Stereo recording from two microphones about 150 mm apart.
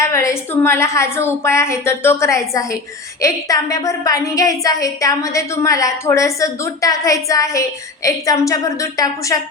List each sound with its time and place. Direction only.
0.0 s a woman's voice: 20° left (ahead or behind)